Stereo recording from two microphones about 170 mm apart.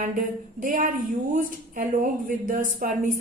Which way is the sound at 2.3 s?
50° right (ahead or behind).